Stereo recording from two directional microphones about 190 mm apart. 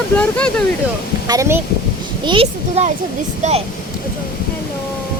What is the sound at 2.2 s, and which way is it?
Speech, 30° right (ahead or behind).